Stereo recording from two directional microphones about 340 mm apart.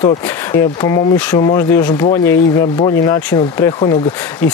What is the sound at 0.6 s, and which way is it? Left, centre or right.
Speech, centre.